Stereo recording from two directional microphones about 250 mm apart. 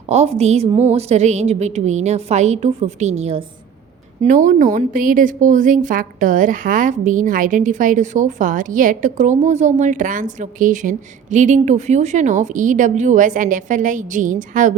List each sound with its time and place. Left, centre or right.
0.1 s a woman's voice: right